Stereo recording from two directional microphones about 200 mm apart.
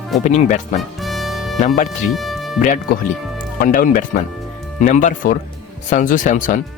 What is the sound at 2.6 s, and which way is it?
Speech, 40° left (ahead or behind).